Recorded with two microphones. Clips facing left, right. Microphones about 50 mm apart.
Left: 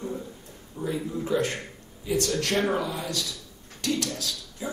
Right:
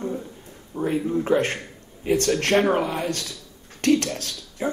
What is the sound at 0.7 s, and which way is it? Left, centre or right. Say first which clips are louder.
Speech: right 7 dB; right.